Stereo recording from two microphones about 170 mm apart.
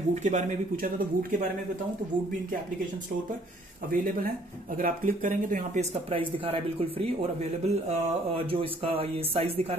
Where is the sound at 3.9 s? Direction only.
60° right (ahead or behind).